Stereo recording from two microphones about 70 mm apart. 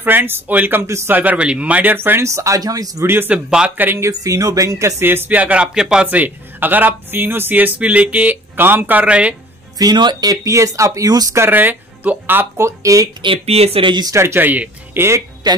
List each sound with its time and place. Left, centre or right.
0.0 s speech: right
3.0 s speech: right
3.4 s speech: centre
3.7 s speech: right
4.0 s speech: right
5.0 s speech: right
5.8 s speech: centre
6.0 s speech: right
9.8 s speech: right
11.3 s speech: right
12.5 s speech: right
14.1 s speech: right
15.0 s speech: right
15.5 s speech: right